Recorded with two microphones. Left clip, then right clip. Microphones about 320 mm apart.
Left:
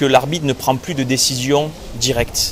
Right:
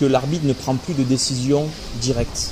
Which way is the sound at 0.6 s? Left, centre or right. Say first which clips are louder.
Left 5 dB; left.